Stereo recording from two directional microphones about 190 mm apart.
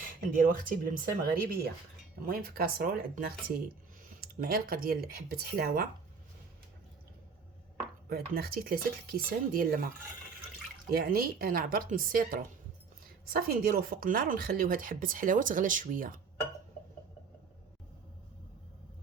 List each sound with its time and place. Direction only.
0.0 s a woman's voice: 45° right (ahead or behind)
8.1 s a woman's voice: 55° right (ahead or behind)
10.9 s a woman's voice: 50° right (ahead or behind)